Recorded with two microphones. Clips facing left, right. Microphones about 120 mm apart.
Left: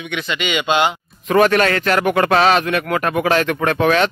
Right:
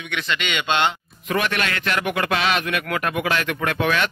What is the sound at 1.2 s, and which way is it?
Speech, 40° left (ahead or behind).